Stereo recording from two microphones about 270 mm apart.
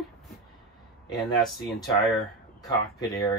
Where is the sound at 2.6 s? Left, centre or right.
Centre.